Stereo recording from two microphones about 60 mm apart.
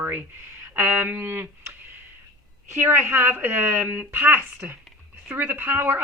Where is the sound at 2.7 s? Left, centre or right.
Right.